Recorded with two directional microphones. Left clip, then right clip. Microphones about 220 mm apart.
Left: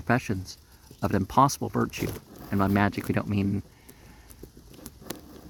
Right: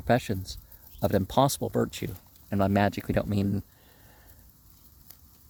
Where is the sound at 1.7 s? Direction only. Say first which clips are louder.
Even; 35° right (ahead or behind).